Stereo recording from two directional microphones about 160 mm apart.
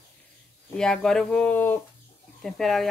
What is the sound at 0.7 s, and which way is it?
Speech, 5° left (ahead or behind).